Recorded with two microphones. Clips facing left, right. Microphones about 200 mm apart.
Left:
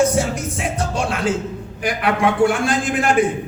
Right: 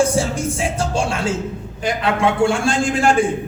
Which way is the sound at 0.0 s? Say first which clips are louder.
Even; 30° right (ahead or behind).